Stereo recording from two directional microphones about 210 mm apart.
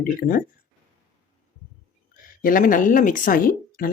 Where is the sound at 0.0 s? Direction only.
40° left (ahead or behind).